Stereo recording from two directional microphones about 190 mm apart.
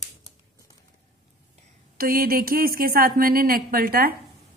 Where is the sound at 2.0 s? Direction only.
50° right (ahead or behind).